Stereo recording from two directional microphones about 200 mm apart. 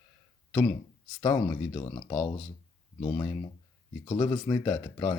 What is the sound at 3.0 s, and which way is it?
Speech, 20° left (ahead or behind).